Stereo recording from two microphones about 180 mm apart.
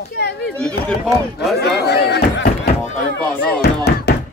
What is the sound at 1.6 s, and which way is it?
Chop, 65° left (ahead or behind).